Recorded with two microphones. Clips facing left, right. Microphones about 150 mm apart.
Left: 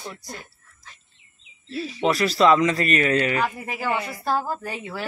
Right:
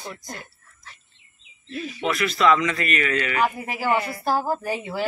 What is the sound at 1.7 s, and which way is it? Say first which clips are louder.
Speech: left 3 dB; 35° left (ahead or behind).